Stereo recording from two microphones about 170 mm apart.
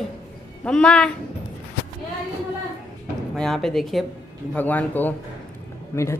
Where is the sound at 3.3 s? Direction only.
5° left (ahead or behind).